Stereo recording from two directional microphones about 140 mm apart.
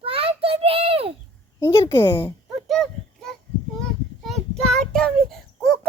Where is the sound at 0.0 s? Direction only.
45° right (ahead or behind).